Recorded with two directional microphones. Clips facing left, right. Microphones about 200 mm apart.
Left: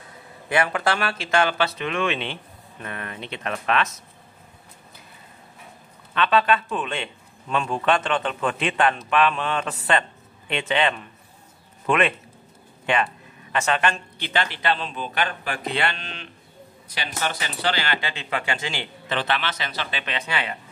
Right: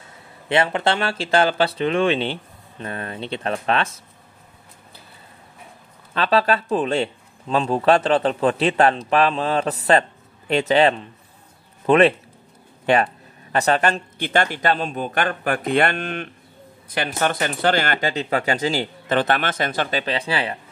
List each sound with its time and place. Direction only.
0.5 s speech: 25° right (ahead or behind)
6.1 s speech: 35° right (ahead or behind)